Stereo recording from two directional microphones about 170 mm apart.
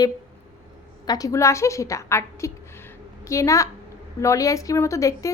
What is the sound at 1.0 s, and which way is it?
A woman's voice, 20° left (ahead or behind).